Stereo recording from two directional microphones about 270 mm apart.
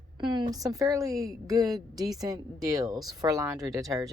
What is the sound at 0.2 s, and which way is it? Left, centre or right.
A woman's voice, centre.